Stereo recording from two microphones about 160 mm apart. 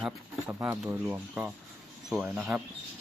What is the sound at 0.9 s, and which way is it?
Speech, 15° right (ahead or behind).